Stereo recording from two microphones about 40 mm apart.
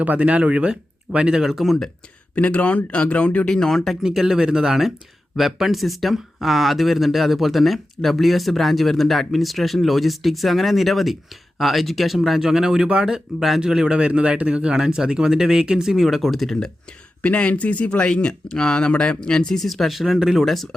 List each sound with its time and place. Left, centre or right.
0.0 s speech: right
1.5 s speech: centre
2.3 s speech: left
3.4 s speech: centre
4.0 s speech: centre
14.1 s speech: right
15.9 s speech: centre
17.2 s speech: left
17.9 s speech: left
19.5 s speech: centre